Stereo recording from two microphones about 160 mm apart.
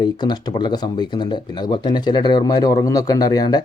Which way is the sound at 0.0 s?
30° left (ahead or behind).